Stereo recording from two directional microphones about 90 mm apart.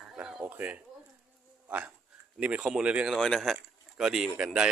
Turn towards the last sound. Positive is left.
turn(degrees=-10)  # may be behind; listen again after turning